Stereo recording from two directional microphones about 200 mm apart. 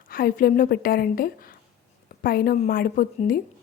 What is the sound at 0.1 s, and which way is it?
A woman's voice, 45° left (ahead or behind).